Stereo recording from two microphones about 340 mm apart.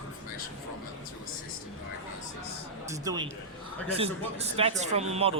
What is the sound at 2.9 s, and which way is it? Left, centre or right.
A man's voice, centre.